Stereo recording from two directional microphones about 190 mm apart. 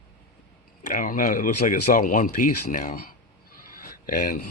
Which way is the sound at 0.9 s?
45° left (ahead or behind).